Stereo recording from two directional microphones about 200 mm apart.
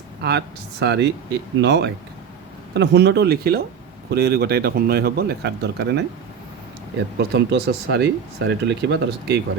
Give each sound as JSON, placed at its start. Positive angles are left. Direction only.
{"t": 0.2, "sound": "speech", "side_deg": -55}
{"t": 7.2, "sound": "speech", "side_deg": -55}